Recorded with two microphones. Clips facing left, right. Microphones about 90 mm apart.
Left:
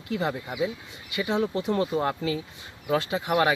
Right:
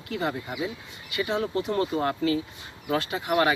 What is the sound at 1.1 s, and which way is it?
Speech, 20° left (ahead or behind).